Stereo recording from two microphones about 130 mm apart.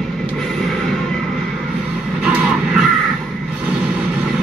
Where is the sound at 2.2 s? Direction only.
5° right (ahead or behind).